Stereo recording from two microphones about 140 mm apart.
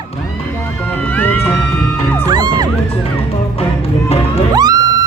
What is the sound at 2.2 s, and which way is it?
Music, 30° right (ahead or behind).